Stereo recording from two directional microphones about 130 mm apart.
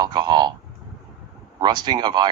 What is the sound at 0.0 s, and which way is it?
Speech, 35° right (ahead or behind).